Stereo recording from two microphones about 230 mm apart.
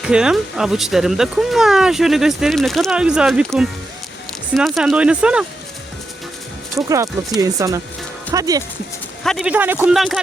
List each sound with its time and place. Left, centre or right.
0.0 s speech: centre
6.7 s speech: centre
9.2 s speech: centre